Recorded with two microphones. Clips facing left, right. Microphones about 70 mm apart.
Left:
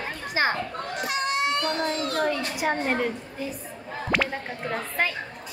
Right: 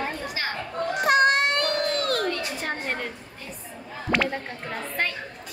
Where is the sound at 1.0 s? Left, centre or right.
Right.